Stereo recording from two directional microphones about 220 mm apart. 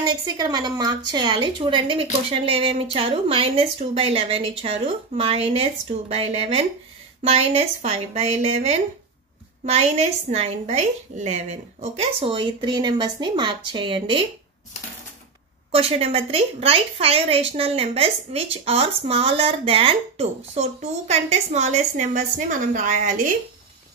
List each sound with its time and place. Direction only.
0.0 s a woman's voice: 20° right (ahead or behind)
15.7 s a woman's voice: 25° right (ahead or behind)